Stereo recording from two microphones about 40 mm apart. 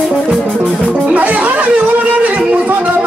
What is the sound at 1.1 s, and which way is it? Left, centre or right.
Music, right.